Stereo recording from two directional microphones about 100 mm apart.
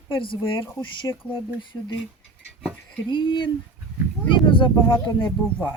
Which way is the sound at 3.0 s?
55° left (ahead or behind).